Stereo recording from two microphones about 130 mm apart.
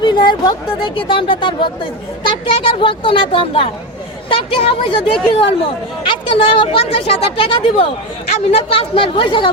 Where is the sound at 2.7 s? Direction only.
40° left (ahead or behind).